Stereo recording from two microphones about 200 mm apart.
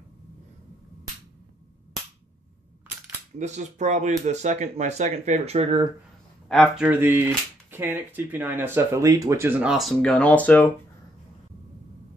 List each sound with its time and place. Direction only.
3.3 s speech: 35° right (ahead or behind)
6.5 s speech: centre (ahead or behind)